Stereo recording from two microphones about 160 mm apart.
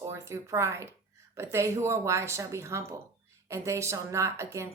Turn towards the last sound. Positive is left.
turn(degrees=-15)  # may be behind; listen again after turning